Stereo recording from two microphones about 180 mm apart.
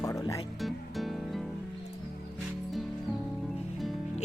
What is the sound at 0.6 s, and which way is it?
Music, centre (ahead or behind).